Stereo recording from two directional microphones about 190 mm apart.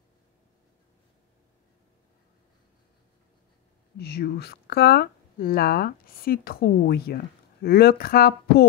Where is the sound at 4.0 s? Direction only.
55° left (ahead or behind).